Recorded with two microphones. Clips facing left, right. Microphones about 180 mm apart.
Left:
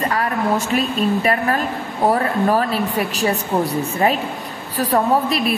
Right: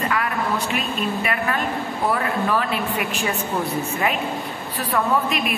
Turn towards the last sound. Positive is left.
turn(degrees=35)  # may be behind; listen again after turning